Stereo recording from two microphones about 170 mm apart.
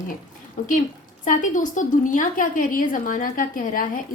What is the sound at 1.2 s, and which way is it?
A woman's voice, 50° left (ahead or behind).